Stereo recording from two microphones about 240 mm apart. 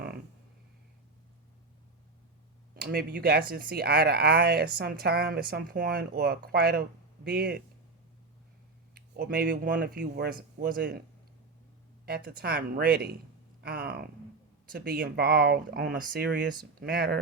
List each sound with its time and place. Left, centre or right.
2.8 s speech: right
9.0 s speech: right
12.0 s speech: right